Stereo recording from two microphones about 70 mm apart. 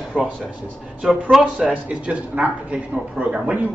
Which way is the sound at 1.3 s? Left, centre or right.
Centre.